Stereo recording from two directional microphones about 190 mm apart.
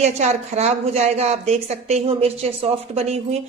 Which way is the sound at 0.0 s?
35° right (ahead or behind).